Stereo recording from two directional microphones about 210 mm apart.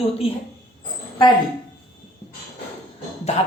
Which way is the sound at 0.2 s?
30° left (ahead or behind).